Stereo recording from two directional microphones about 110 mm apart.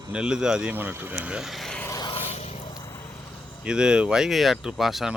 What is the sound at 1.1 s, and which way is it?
Speech, 5° right (ahead or behind).